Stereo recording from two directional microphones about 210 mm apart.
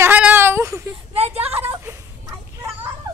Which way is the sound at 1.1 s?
30° right (ahead or behind).